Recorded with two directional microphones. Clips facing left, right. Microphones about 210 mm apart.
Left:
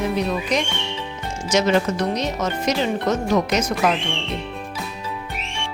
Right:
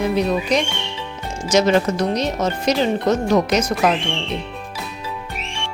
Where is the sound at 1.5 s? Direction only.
35° right (ahead or behind).